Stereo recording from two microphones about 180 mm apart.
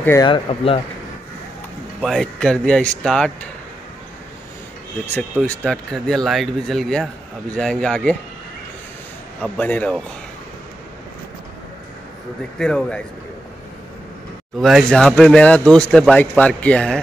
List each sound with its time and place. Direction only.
0.2 s speech: 30° left (ahead or behind)
2.0 s speech: centre (ahead or behind)
5.4 s speech: 5° left (ahead or behind)
9.4 s a man's voice: 10° left (ahead or behind)
12.5 s speech: 5° left (ahead or behind)
14.6 s speech: centre (ahead or behind)